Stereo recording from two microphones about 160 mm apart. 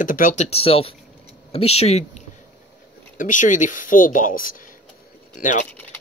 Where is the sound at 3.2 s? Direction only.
55° left (ahead or behind).